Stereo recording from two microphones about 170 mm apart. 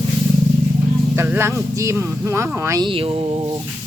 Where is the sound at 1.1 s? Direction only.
15° right (ahead or behind).